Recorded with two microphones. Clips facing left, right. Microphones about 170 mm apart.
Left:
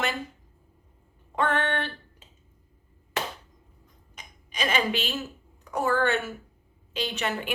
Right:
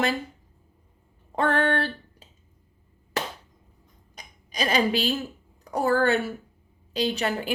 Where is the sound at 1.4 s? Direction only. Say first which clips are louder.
Right 3 dB; 35° right (ahead or behind).